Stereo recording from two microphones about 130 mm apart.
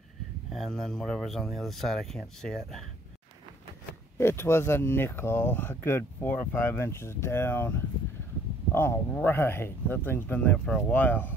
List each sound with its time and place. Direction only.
0.5 s speech: centre (ahead or behind)
4.2 s speech: 20° left (ahead or behind)